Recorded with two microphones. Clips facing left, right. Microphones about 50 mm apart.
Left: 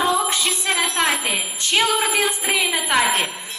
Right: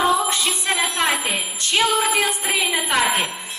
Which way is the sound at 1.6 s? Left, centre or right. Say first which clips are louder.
Even; left.